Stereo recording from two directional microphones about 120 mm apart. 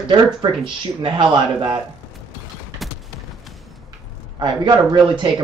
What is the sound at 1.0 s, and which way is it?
Speech, 40° right (ahead or behind).